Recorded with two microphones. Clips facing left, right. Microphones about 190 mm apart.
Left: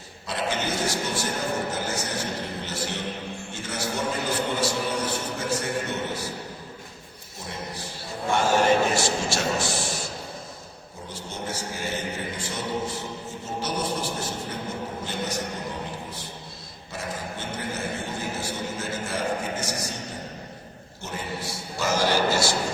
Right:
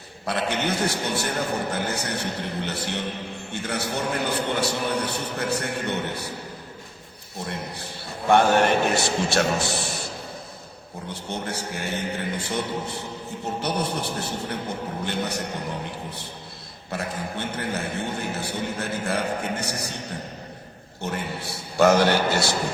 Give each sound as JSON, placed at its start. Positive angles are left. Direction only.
{"t": 0.3, "sound": "a man's voice", "side_deg": -60}
{"t": 7.3, "sound": "a man's voice", "side_deg": -60}
{"t": 11.1, "sound": "a man's voice", "side_deg": -60}
{"t": 16.9, "sound": "a man's voice", "side_deg": -60}
{"t": 21.0, "sound": "a man's voice", "side_deg": -60}